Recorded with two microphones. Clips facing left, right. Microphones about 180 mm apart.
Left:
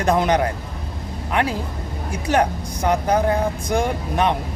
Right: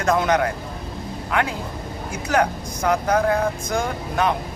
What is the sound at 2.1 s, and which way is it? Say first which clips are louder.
Speech: left 1 dB; 35° left (ahead or behind).